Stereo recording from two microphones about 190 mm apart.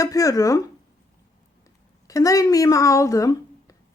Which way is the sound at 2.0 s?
20° left (ahead or behind).